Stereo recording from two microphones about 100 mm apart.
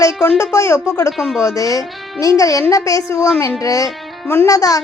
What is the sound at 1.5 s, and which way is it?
A woman's voice, 35° left (ahead or behind).